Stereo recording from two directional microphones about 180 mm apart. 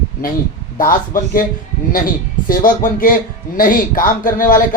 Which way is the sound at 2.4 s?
50° left (ahead or behind).